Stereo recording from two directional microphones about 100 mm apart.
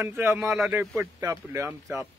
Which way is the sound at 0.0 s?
25° right (ahead or behind).